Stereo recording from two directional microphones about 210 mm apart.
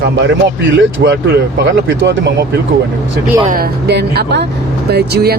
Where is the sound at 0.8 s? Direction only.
55° right (ahead or behind).